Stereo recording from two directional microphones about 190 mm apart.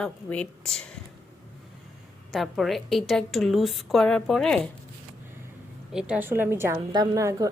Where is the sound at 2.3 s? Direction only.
Centre (ahead or behind).